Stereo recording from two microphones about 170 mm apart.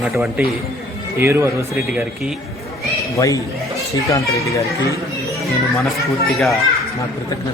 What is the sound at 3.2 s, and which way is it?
A man's voice, 20° left (ahead or behind).